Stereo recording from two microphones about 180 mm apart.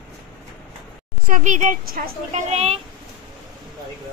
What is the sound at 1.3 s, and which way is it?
A woman's voice, 45° right (ahead or behind).